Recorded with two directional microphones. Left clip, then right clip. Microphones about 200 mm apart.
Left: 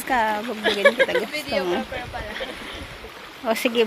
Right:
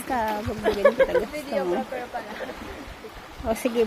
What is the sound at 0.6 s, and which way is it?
Speech, 25° right (ahead or behind).